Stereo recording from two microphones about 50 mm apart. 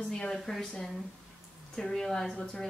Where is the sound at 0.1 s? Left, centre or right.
Centre.